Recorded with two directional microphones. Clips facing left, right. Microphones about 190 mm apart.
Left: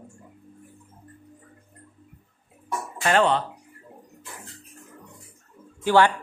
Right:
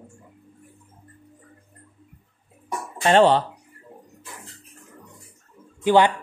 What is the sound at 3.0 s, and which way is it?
Speech, 30° right (ahead or behind).